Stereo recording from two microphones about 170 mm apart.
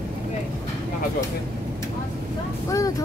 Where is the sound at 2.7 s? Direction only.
20° left (ahead or behind).